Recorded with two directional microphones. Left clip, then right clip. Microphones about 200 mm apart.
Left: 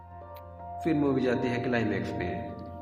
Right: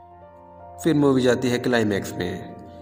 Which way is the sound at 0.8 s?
50° right (ahead or behind).